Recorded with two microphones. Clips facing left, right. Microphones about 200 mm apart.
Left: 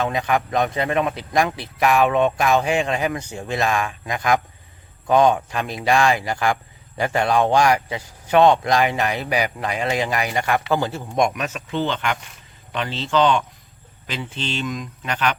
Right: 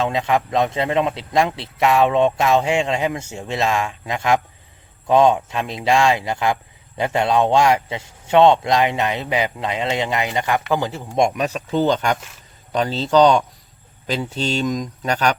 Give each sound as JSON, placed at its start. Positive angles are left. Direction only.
{"t": 0.0, "sound": "speech", "side_deg": -25}
{"t": 11.2, "sound": "speech", "side_deg": -30}